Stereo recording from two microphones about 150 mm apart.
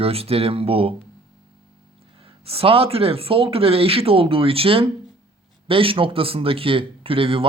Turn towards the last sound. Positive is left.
turn(degrees=-35)  # may be behind; listen again after turning